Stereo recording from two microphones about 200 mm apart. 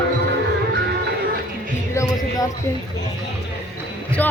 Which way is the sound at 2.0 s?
15° left (ahead or behind).